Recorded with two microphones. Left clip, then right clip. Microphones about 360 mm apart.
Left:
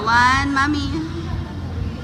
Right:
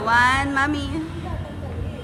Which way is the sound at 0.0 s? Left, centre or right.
Centre.